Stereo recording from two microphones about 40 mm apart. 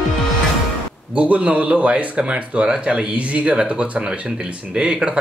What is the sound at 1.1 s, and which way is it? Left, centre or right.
A man's voice, right.